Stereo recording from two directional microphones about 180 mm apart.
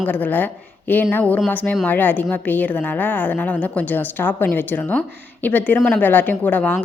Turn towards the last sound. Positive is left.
turn(degrees=10)  # may be behind; listen again after turning